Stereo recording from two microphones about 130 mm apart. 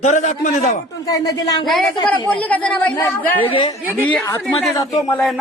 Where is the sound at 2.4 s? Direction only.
10° left (ahead or behind).